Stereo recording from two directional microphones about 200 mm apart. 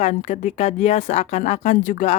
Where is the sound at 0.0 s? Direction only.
35° left (ahead or behind).